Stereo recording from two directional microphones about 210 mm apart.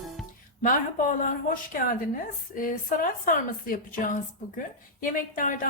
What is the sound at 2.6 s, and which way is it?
A woman's voice, 40° left (ahead or behind).